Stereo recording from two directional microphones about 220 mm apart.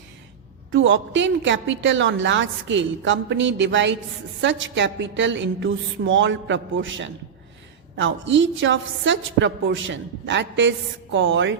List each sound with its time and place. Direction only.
0.7 s a woman's voice: 60° right (ahead or behind)